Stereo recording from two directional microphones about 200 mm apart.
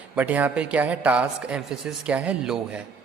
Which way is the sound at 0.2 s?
10° right (ahead or behind).